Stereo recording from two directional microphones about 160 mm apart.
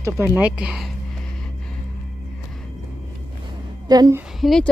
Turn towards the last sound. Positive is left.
turn(degrees=0)  # may be behind; listen again after turning